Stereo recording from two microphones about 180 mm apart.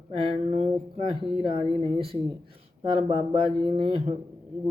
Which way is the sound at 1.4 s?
30° right (ahead or behind).